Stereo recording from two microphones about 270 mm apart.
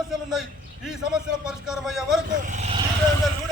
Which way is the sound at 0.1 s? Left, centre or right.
Centre.